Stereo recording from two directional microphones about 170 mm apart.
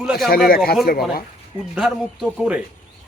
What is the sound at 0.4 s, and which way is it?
Speech, 60° left (ahead or behind).